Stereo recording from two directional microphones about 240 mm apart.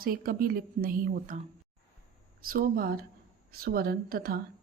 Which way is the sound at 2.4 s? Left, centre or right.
Right.